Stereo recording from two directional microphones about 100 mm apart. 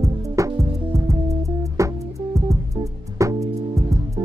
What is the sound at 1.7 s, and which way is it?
Music, 30° right (ahead or behind).